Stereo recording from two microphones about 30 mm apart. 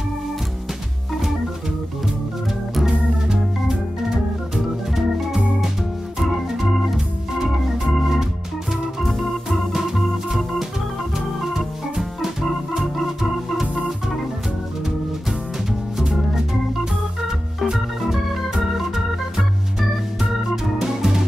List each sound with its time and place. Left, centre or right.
4.1 s organ: centre
12.2 s organ: centre
18.0 s organ: centre
20.8 s music: centre